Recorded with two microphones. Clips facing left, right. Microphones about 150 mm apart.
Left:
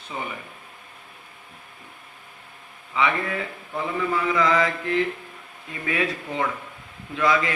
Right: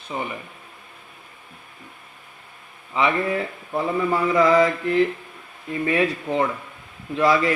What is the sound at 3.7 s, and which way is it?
Mantra, 35° right (ahead or behind).